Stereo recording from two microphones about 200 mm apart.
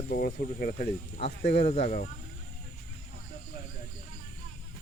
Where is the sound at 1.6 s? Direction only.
35° left (ahead or behind).